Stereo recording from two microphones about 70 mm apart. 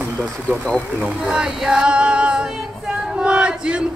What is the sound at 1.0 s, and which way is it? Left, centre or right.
Music, centre.